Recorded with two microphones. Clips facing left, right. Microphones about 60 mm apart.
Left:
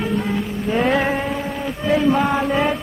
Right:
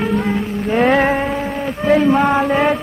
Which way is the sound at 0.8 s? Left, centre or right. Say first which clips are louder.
Right 5 dB; right.